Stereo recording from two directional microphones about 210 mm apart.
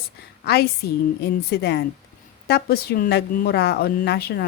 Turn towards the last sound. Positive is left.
turn(degrees=50)  # may be behind; listen again after turning